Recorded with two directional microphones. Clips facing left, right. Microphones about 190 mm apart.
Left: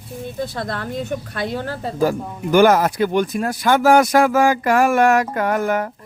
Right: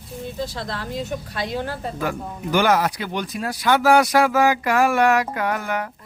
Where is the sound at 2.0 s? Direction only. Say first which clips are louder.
Left 7 dB; 40° left (ahead or behind).